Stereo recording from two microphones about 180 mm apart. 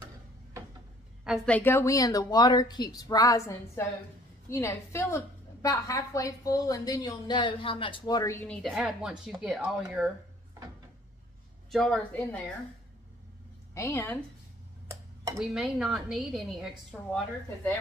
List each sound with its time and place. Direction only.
1.2 s a woman's voice: centre (ahead or behind)
8.5 s a woman's voice: centre (ahead or behind)
11.7 s a woman's voice: 5° left (ahead or behind)
13.7 s a woman's voice: 15° left (ahead or behind)
15.3 s a woman's voice: centre (ahead or behind)